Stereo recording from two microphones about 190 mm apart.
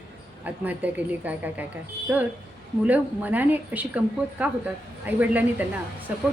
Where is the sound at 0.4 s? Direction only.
10° right (ahead or behind).